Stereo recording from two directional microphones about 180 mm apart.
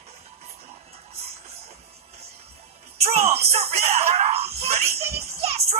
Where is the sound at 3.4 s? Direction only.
35° right (ahead or behind).